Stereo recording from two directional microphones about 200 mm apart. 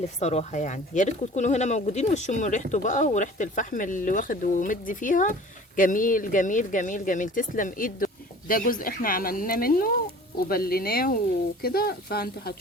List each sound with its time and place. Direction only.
0.2 s speech: 35° left (ahead or behind); by 12.5 s 50° left (ahead or behind)